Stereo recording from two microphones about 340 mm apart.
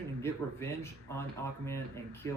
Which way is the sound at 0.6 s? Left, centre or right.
Centre.